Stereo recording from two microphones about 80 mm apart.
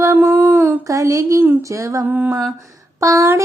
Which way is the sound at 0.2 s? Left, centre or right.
Right.